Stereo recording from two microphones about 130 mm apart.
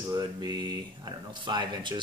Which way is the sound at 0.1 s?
30° right (ahead or behind).